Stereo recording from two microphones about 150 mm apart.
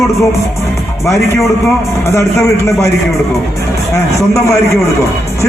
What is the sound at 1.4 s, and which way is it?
A man's voice, 15° left (ahead or behind).